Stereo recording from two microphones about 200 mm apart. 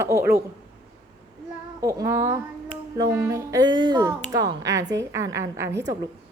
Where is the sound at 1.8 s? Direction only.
15° right (ahead or behind).